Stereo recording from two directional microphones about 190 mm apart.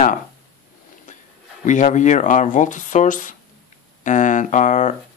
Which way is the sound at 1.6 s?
40° left (ahead or behind).